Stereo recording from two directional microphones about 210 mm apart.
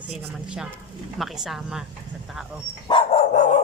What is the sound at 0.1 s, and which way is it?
Speech, 5° right (ahead or behind).